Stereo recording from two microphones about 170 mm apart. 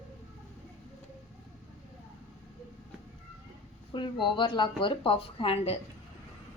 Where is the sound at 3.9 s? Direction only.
30° left (ahead or behind).